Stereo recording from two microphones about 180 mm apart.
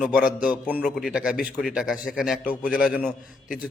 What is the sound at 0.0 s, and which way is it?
A man's voice, 5° right (ahead or behind).